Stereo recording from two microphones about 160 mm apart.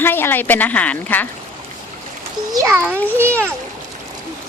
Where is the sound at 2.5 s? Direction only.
20° right (ahead or behind).